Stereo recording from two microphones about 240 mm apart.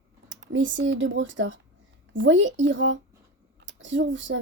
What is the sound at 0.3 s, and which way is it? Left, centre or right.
Speech, right.